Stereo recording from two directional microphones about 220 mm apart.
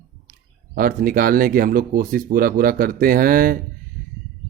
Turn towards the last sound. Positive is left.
turn(degrees=-40)  # may be behind; listen again after turning